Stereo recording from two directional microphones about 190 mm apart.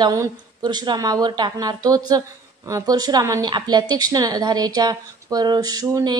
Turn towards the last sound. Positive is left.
turn(degrees=-20)  # may be behind; listen again after turning